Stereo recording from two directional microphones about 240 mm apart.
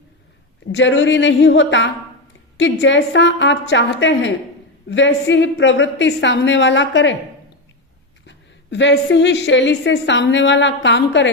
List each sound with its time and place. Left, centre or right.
0.7 s a woman's voice: left
8.3 s a woman's voice: left